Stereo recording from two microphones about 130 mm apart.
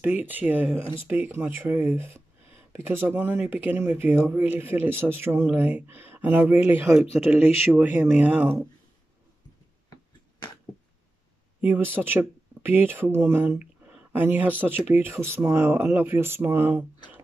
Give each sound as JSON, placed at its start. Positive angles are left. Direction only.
{"t": 0.0, "sound": "speech", "side_deg": -15}
{"t": 11.6, "sound": "speech", "side_deg": -15}